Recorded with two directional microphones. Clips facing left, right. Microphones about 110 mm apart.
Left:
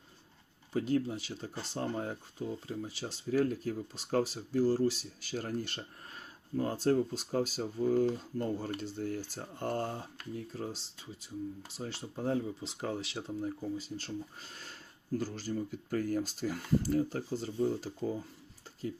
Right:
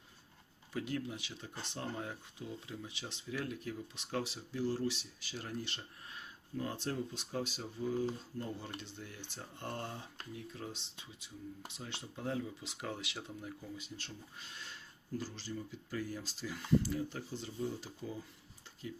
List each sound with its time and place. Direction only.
0.7 s speech: 35° left (ahead or behind)